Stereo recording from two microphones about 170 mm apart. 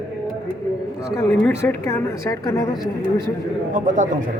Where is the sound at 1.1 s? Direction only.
15° left (ahead or behind).